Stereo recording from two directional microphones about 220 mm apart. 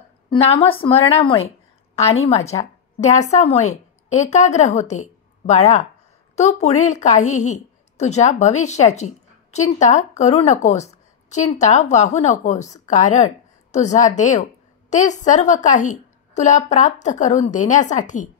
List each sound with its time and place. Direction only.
0.3 s a woman's voice: 25° left (ahead or behind)